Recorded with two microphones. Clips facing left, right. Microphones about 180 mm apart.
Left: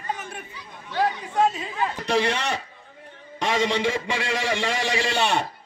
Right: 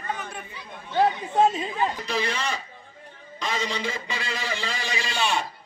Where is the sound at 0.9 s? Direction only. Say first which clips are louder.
Right 2 dB; 25° right (ahead or behind).